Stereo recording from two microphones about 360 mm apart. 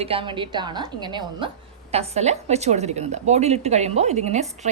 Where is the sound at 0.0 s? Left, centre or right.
Centre.